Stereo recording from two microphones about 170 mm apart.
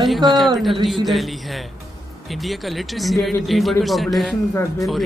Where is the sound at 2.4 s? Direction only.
Centre (ahead or behind).